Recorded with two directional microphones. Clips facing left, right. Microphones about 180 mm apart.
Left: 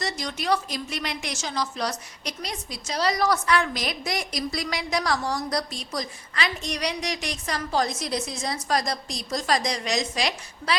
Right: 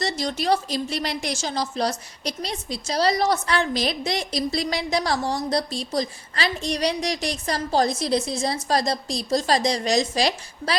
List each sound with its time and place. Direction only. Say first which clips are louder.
0.0 s a woman's voice: right 5 dB; 30° right (ahead or behind)